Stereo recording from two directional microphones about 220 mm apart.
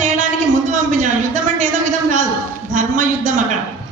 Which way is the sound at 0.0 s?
35° right (ahead or behind).